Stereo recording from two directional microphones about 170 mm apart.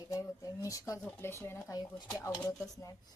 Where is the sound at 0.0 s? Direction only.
20° left (ahead or behind).